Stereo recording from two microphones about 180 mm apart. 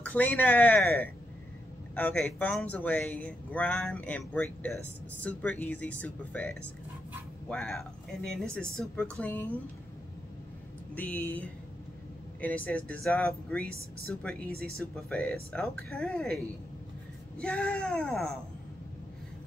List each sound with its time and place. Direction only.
0.0 s speech: 10° left (ahead or behind)
11.0 s speech: 10° left (ahead or behind)
17.4 s speech: 5° left (ahead or behind)